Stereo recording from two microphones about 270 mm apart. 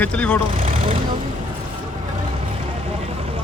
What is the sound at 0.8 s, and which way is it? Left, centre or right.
Speech, centre.